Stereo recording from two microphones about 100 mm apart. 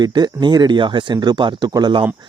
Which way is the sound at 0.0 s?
45° right (ahead or behind).